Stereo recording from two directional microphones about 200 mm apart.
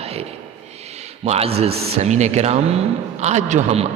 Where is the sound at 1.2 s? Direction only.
30° right (ahead or behind).